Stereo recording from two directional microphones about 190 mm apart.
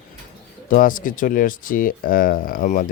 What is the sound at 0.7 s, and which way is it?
Speech, 45° left (ahead or behind).